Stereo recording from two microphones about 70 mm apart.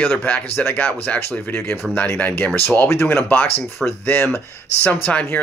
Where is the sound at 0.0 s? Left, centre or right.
Left.